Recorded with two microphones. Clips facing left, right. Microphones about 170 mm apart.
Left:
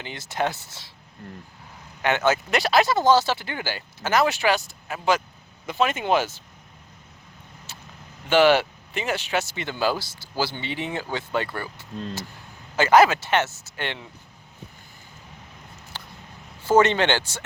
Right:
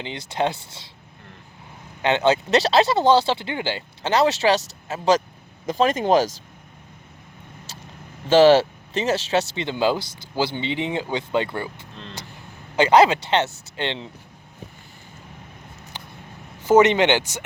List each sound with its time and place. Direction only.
0.0 s speech: 20° right (ahead or behind)
2.0 s speech: 20° right (ahead or behind); by 6.3 s 35° right (ahead or behind)
8.3 s speech: 30° right (ahead or behind)
12.7 s speech: 20° right (ahead or behind)
15.9 s a sound: 15° right (ahead or behind)
16.6 s speech: 15° right (ahead or behind)